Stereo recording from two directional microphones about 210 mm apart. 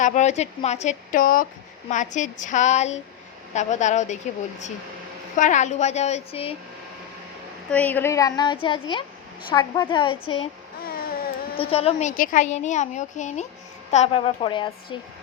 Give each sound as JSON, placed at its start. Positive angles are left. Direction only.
{"t": 0.0, "sound": "a woman's voice", "side_deg": 35}
{"t": 5.4, "sound": "a woman's voice", "side_deg": 35}
{"t": 7.7, "sound": "a woman's voice", "side_deg": 5}
{"t": 10.8, "sound": "a sound", "side_deg": 45}
{"t": 11.5, "sound": "a woman's voice", "side_deg": 25}